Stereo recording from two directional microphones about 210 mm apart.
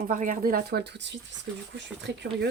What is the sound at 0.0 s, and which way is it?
Speech, 40° right (ahead or behind).